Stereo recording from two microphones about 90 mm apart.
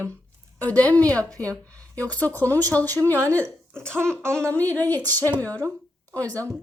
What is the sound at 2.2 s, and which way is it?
A woman's voice, 20° left (ahead or behind).